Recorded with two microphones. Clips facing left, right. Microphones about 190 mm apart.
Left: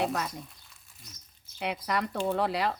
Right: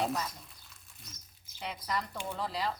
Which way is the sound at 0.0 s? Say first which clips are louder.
Left 3 dB; 70° left (ahead or behind).